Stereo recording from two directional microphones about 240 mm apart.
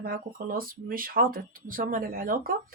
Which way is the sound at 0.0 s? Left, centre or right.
Right.